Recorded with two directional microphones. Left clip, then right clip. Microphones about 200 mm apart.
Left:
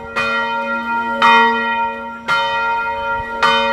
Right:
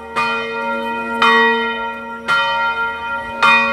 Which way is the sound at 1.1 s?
30° right (ahead or behind).